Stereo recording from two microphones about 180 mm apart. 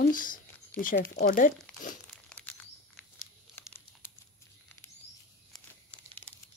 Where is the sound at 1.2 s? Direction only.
50° left (ahead or behind).